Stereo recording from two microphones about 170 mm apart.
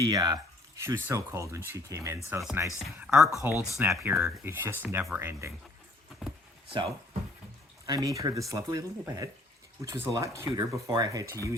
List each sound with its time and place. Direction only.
0.0 s speech: 20° right (ahead or behind)
6.2 s speech: 5° right (ahead or behind)
6.7 s speech: 35° right (ahead or behind)
7.9 s speech: 20° right (ahead or behind)